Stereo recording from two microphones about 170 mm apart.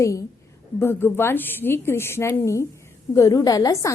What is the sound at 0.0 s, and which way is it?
A woman's voice, 20° left (ahead or behind).